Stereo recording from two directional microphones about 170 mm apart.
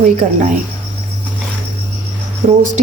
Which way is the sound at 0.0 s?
50° right (ahead or behind).